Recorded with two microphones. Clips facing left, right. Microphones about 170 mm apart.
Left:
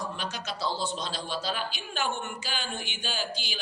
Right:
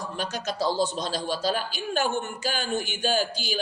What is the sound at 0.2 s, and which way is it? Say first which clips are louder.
Speech: right 6 dB; 40° right (ahead or behind).